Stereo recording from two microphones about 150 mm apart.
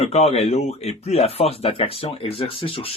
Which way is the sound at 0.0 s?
45° left (ahead or behind).